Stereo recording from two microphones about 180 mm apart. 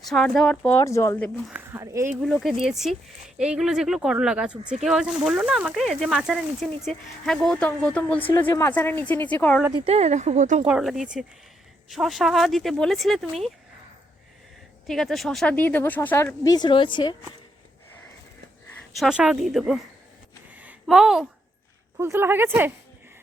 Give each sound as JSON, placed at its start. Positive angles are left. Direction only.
{"t": 0.1, "sound": "speech", "side_deg": 0}
{"t": 1.5, "sound": "speech", "side_deg": -10}
{"t": 2.2, "sound": "speech", "side_deg": 0}
{"t": 9.7, "sound": "speech", "side_deg": -35}
{"t": 10.7, "sound": "speech", "side_deg": -5}
{"t": 14.8, "sound": "speech", "side_deg": 0}
{"t": 18.9, "sound": "speech", "side_deg": -5}
{"t": 20.6, "sound": "a sound", "side_deg": -5}
{"t": 21.9, "sound": "speech", "side_deg": -15}